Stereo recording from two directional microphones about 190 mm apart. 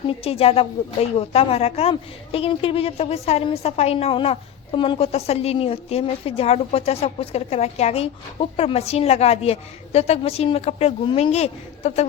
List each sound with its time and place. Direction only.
0.1 s a woman's voice: 30° left (ahead or behind)